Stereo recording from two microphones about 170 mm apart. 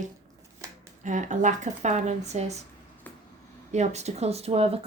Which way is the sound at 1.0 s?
45° right (ahead or behind).